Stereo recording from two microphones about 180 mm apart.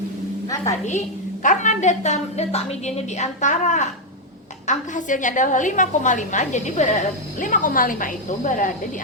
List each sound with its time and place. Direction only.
0.4 s a woman's voice: 20° left (ahead or behind)
0.9 s a woman's voice: 45° left (ahead or behind)